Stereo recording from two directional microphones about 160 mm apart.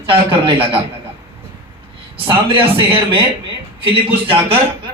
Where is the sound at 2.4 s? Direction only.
35° right (ahead or behind).